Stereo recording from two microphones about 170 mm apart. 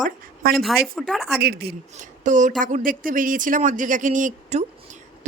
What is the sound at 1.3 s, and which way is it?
Speech, 70° right (ahead or behind).